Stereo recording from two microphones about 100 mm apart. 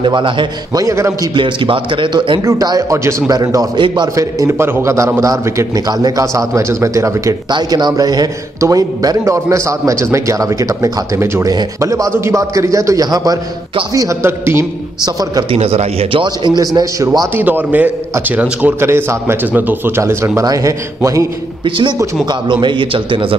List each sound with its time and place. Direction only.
0.0 s speech: 55° right (ahead or behind)
0.7 s a man's voice: 35° right (ahead or behind)
1.3 s speech: 55° right (ahead or behind)
2.4 s a man's voice: 35° right (ahead or behind)
3.3 s a man's voice: 40° right (ahead or behind)
3.8 s a man's voice: 55° right (ahead or behind)
4.1 s a man's voice: 35° right (ahead or behind)
7.5 s a man's voice: 45° right (ahead or behind); by 14.7 s 25° right (ahead or behind)
15.0 s a man's voice: 40° right (ahead or behind)
15.5 s speech: 90° right; by 16.5 s 60° right (ahead or behind)
16.5 s a man's voice: 35° right (ahead or behind)
17.4 s a man's voice: 15° right (ahead or behind)
21.6 s a man's voice: 60° right (ahead or behind)